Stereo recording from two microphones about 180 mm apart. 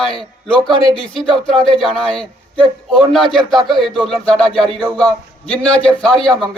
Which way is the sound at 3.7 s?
Centre (ahead or behind).